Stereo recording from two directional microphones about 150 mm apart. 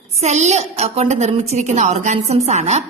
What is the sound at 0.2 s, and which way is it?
A woman's voice, 50° right (ahead or behind).